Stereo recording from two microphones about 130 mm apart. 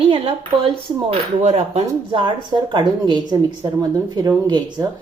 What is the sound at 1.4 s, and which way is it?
Speech, 60° right (ahead or behind).